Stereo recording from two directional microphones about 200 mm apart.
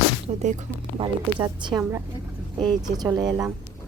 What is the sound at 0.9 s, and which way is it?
Speech, 25° right (ahead or behind).